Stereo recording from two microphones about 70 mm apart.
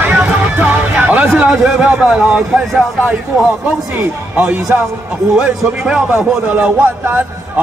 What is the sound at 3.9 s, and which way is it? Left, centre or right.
A man's voice, right.